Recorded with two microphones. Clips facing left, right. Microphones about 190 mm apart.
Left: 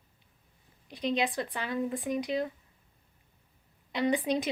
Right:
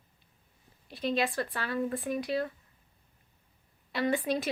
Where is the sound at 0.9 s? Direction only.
15° left (ahead or behind).